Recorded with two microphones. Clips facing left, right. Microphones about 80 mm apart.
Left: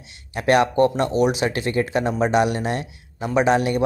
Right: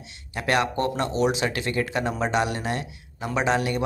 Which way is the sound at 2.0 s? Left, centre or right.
Centre.